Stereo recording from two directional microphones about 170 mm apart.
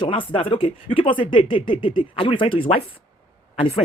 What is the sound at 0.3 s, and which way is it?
A man's voice, 30° left (ahead or behind).